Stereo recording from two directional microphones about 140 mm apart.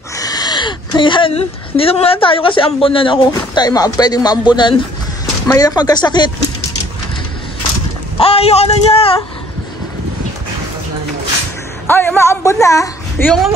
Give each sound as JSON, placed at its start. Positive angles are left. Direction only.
{"t": 0.2, "sound": "speech", "side_deg": 30}
{"t": 3.3, "sound": "speech", "side_deg": 25}
{"t": 8.2, "sound": "speech", "side_deg": 45}
{"t": 11.9, "sound": "speech", "side_deg": 15}